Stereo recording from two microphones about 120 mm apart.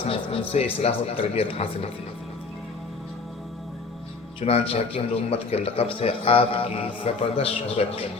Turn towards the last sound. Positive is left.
turn(degrees=60)  # may be behind; listen again after turning